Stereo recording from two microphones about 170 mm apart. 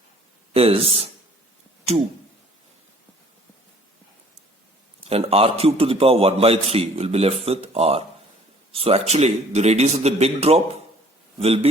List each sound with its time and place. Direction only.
0.5 s a man's voice: 35° right (ahead or behind)
5.0 s a man's voice: 35° right (ahead or behind)